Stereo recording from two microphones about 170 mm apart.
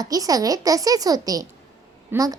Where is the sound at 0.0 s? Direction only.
20° right (ahead or behind).